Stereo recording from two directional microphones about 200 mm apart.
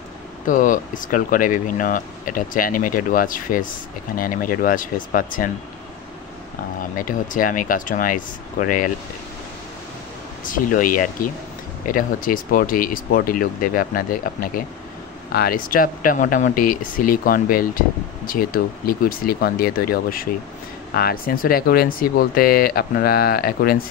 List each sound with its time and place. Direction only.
0.5 s speech: 40° left (ahead or behind)
7.0 s speech: 45° left (ahead or behind)
10.4 s speech: 40° left (ahead or behind)